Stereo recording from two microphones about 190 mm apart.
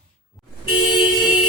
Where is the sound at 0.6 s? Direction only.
25° left (ahead or behind).